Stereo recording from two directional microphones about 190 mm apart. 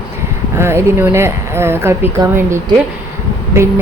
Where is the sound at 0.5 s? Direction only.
15° right (ahead or behind).